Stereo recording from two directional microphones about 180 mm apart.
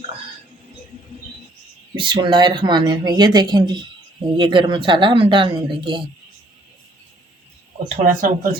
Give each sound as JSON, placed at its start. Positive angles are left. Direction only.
{"t": 2.0, "sound": "speech", "side_deg": -25}
{"t": 7.9, "sound": "speech", "side_deg": -45}